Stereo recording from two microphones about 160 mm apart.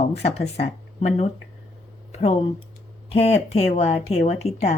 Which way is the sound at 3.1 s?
40° left (ahead or behind).